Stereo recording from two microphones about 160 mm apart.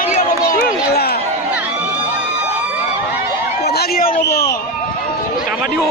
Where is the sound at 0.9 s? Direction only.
80° left.